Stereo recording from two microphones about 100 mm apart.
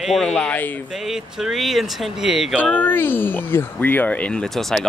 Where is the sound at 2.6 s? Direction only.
15° left (ahead or behind).